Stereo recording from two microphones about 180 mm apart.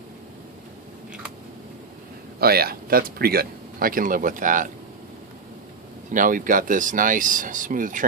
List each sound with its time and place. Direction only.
2.4 s speech: 60° right (ahead or behind)
6.0 s speech: 45° right (ahead or behind)